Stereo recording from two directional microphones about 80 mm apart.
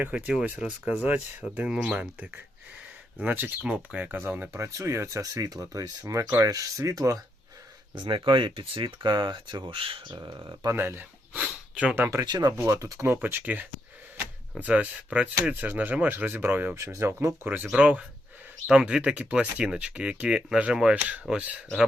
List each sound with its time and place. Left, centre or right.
0.0 s speech: centre
4.2 s speech: right
5.2 s speech: right
7.9 s speech: right
10.7 s speech: right
11.4 s a sound: centre
11.9 s speech: right
12.2 s speech: right
12.5 s speech: right
13.2 s speech: right
16.7 s speech: right
17.7 s speech: centre